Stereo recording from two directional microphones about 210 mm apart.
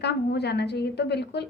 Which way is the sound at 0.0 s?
50° left (ahead or behind).